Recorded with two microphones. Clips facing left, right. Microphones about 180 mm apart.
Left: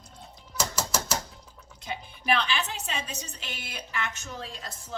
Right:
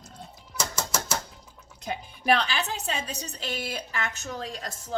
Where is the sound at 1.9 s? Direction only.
40° right (ahead or behind).